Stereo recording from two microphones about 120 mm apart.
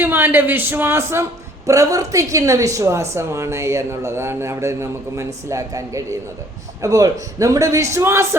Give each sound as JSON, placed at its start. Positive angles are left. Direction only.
{"t": 0.0, "sound": "a woman's voice", "side_deg": -15}